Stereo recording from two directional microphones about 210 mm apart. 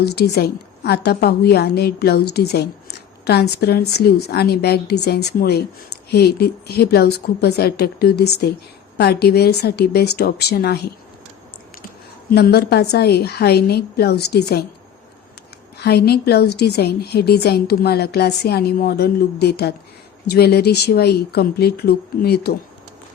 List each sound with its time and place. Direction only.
0.0 s a woman's voice: 50° left (ahead or behind)
12.3 s a woman's voice: 50° left (ahead or behind)
15.8 s a woman's voice: 50° left (ahead or behind)